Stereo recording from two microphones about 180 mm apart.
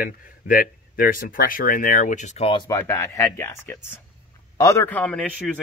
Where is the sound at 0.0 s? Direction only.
50° left (ahead or behind); by 2.8 s 25° left (ahead or behind).